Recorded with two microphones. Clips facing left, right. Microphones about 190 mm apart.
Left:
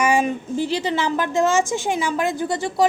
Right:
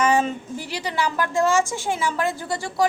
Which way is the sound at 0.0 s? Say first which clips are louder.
Left 1 dB; 10° left (ahead or behind).